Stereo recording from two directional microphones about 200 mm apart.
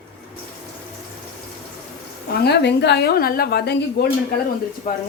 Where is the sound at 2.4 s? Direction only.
55° left (ahead or behind).